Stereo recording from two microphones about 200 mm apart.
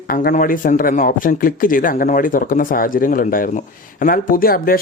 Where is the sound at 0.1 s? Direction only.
45° left (ahead or behind).